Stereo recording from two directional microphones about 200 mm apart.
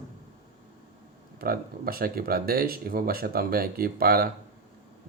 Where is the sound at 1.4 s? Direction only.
50° right (ahead or behind).